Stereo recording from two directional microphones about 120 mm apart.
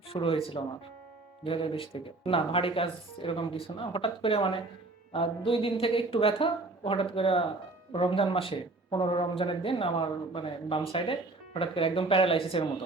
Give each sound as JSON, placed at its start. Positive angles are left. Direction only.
{"t": 0.1, "sound": "speech", "side_deg": 50}